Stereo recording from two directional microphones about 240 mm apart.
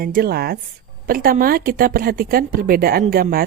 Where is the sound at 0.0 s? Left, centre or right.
Right.